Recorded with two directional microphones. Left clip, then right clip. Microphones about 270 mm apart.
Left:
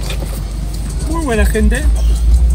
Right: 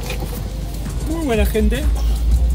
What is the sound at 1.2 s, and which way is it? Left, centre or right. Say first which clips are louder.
Speech: left 2 dB; left.